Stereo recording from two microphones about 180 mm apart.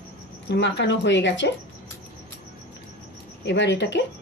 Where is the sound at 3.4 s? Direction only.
80° left.